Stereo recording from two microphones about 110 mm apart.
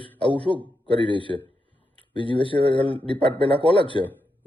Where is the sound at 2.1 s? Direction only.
50° left (ahead or behind).